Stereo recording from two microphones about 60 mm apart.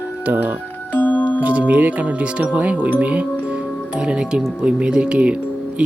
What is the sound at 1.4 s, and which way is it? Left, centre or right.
Speech, right.